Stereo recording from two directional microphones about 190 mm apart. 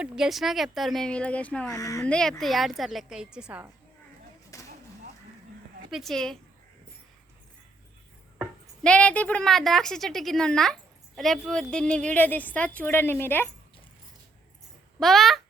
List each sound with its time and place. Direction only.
0.0 s a woman's voice: centre (ahead or behind)
1.7 s a woman's voice: 15° left (ahead or behind)
2.0 s a woman's voice: 5° left (ahead or behind)
4.5 s a sound: 15° left (ahead or behind)
5.9 s a woman's voice: centre (ahead or behind)
8.4 s a woman's voice: 5° left (ahead or behind)
14.9 s speech: centre (ahead or behind)